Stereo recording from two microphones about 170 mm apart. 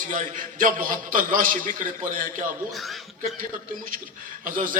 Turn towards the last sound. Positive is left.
turn(degrees=-50)  # may be behind; listen again after turning